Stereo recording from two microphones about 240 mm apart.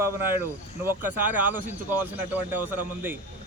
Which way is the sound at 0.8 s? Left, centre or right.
Centre.